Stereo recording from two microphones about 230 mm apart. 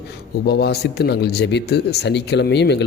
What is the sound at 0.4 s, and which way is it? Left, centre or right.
Speech, left.